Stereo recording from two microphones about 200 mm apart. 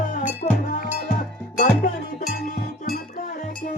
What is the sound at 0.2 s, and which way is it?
Cowbell, 40° left (ahead or behind).